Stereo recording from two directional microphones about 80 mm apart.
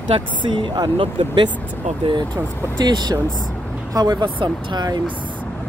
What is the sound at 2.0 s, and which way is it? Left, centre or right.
Speech, right.